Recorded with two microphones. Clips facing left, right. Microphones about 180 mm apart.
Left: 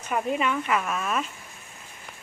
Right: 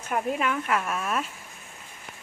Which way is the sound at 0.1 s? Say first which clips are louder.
Left 1 dB; centre (ahead or behind).